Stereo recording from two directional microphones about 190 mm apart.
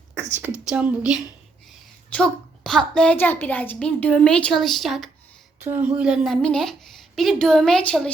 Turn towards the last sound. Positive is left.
turn(degrees=5)  # may be behind; listen again after turning